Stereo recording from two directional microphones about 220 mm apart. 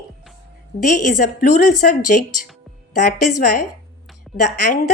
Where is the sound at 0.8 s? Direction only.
35° left (ahead or behind).